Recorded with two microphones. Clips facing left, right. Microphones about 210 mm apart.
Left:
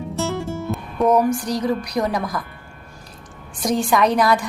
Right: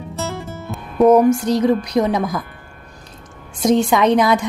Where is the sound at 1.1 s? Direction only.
25° right (ahead or behind).